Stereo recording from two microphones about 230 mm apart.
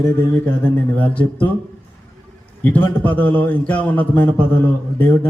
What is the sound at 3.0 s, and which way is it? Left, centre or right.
A man's voice, centre.